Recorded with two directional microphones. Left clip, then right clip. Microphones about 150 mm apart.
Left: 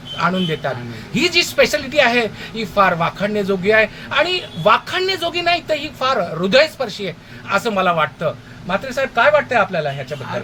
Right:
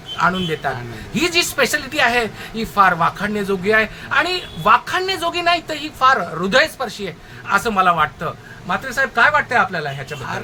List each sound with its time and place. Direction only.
0.2 s speech: 15° left (ahead or behind)